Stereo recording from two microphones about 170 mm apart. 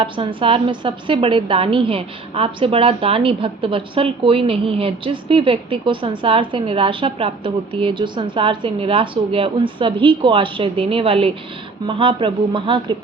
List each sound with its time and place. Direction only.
0.0 s a woman's voice: 30° right (ahead or behind)